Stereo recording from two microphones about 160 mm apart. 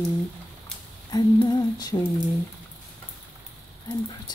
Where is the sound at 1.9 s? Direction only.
25° left (ahead or behind).